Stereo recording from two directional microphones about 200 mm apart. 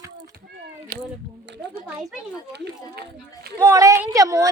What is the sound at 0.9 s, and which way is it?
Speech, 50° right (ahead or behind).